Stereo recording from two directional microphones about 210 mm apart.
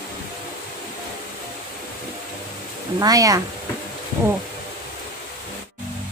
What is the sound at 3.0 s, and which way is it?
Speech, 15° right (ahead or behind).